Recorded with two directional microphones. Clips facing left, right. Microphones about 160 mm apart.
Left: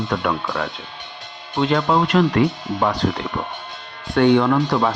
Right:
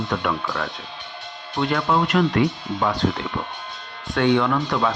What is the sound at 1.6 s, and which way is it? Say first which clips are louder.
Speech: left 3 dB; 25° left (ahead or behind).